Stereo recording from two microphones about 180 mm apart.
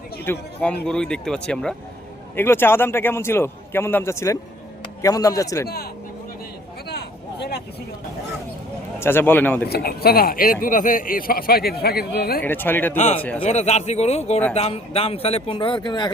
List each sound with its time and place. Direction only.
0.3 s a man's voice: 5° left (ahead or behind)
6.8 s a sound: 65° left (ahead or behind)
9.0 s a man's voice: 10° left (ahead or behind)
9.6 s speech: 60° left (ahead or behind)
12.4 s a man's voice: 10° left (ahead or behind)
13.0 s speech: 40° left (ahead or behind); by 16.1 s 25° left (ahead or behind)